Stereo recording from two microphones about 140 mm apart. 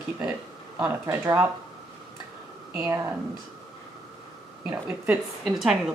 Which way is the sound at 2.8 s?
20° right (ahead or behind).